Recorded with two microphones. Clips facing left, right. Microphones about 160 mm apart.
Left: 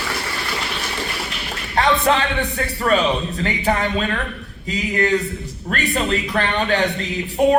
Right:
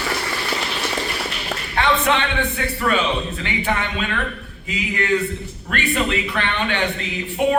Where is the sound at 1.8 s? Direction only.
35° left (ahead or behind).